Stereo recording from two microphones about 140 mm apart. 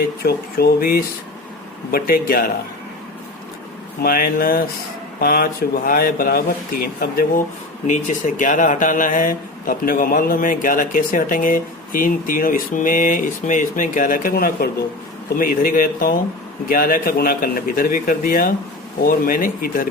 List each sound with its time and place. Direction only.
0.6 s speech: 90° left
4.0 s speech: 90° left
7.9 s speech: 65° left (ahead or behind); by 19.9 s 90° left